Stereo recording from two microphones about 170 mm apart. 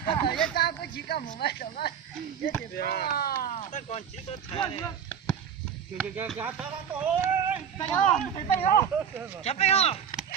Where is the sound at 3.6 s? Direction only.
45° left (ahead or behind).